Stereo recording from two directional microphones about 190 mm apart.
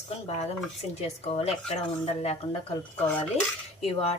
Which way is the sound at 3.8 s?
35° left (ahead or behind).